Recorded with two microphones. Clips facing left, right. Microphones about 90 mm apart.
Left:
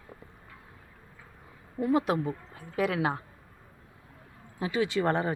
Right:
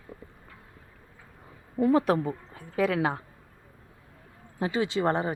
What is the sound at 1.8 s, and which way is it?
A woman's voice, 40° right (ahead or behind).